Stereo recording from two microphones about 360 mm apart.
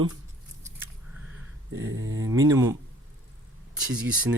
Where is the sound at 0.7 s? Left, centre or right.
Centre.